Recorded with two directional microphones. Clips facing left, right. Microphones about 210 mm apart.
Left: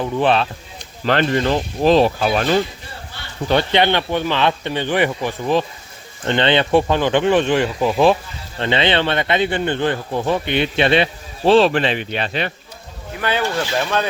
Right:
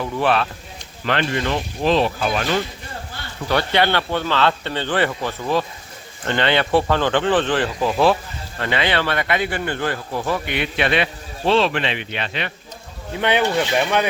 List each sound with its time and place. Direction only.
0.0 s speech: 20° left (ahead or behind)
1.0 s speech: 40° left (ahead or behind)
3.5 s speech: 20° left (ahead or behind); by 12.5 s 40° left (ahead or behind)
13.1 s speech: 20° right (ahead or behind)